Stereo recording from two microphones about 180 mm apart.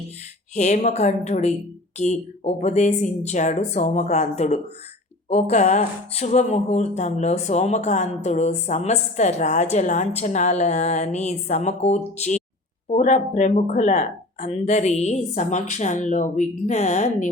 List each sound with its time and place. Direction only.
0.5 s speech: 40° left (ahead or behind)